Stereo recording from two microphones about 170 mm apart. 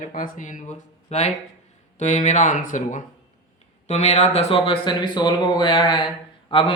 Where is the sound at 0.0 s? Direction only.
50° left (ahead or behind).